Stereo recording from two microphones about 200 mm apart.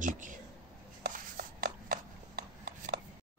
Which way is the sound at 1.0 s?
45° right (ahead or behind).